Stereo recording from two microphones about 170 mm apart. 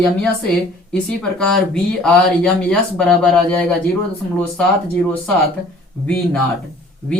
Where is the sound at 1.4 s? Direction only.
5° left (ahead or behind).